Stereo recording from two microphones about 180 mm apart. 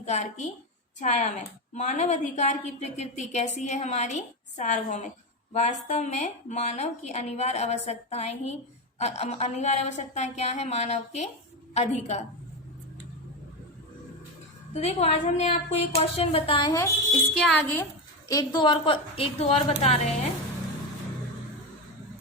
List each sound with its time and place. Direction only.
0.0 s a woman's voice: 40° left (ahead or behind)
14.7 s a woman's voice: 35° left (ahead or behind)
17.3 s speech: centre (ahead or behind)
18.3 s a woman's voice: 20° left (ahead or behind); by 20.1 s 40° left (ahead or behind)